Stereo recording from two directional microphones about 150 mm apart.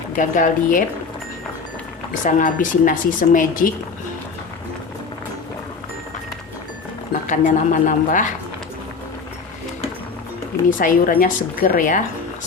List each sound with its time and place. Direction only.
0.2 s speech: 60° left (ahead or behind)
2.2 s speech: 60° left (ahead or behind)
7.1 s speech: 55° left (ahead or behind)
10.7 s speech: 65° left (ahead or behind)